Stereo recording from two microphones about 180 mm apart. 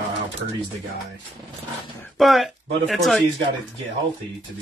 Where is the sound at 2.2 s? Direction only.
Centre (ahead or behind).